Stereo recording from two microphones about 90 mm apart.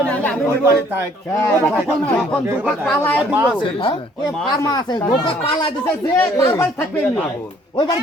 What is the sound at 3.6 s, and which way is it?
Speech, 70° left (ahead or behind).